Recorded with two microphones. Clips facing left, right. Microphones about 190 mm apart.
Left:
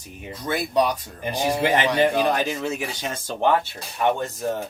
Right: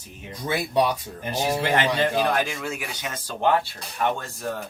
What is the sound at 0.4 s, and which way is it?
Speech, 10° right (ahead or behind).